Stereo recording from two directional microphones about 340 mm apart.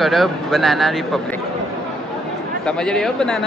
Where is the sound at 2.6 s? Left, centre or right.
Centre.